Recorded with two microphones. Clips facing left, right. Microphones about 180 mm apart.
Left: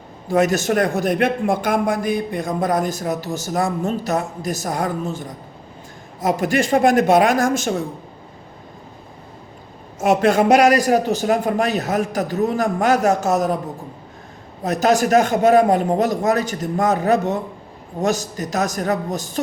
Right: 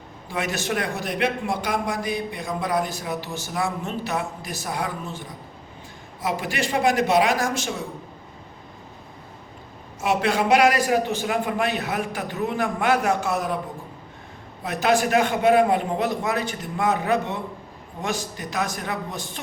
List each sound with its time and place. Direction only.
0.3 s a man's voice: 45° left (ahead or behind)
10.0 s a man's voice: 45° left (ahead or behind)
14.6 s a man's voice: 40° left (ahead or behind)